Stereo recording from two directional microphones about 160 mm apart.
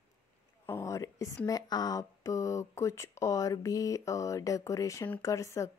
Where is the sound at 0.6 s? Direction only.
15° left (ahead or behind).